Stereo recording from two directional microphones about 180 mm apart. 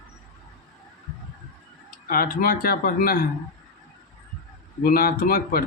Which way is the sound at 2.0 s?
55° left (ahead or behind).